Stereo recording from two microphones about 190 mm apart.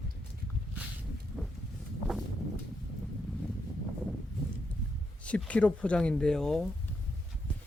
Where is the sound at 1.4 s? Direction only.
5° right (ahead or behind).